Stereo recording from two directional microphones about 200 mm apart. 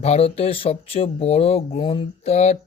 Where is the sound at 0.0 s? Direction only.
30° left (ahead or behind).